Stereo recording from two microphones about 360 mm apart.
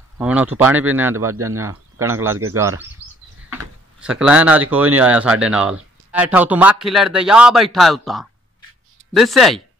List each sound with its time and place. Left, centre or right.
0.2 s speech: centre
1.3 s speech: right
1.6 s speech: centre
4.0 s speech: centre